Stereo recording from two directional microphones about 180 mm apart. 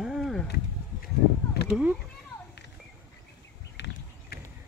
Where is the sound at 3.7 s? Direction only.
75° left (ahead or behind).